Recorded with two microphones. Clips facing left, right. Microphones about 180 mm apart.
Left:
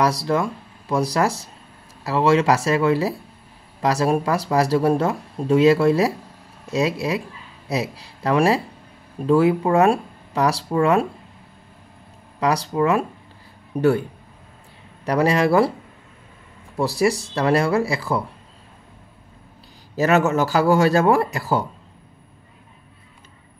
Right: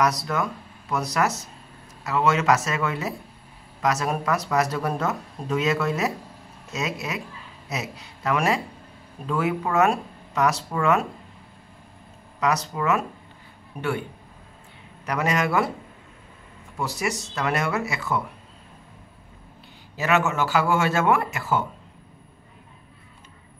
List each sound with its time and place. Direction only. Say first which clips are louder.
0.0 s speech: left 4 dB; 30° left (ahead or behind)
12.4 s speech: left 5 dB; 30° left (ahead or behind)
15.0 s speech: left 6 dB; 35° left (ahead or behind)
16.7 s speech: left 8 dB; 35° left (ahead or behind)
20.0 s speech: left 5 dB; 40° left (ahead or behind)